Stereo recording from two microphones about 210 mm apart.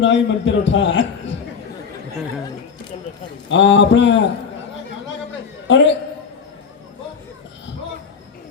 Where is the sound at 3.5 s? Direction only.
60° left (ahead or behind).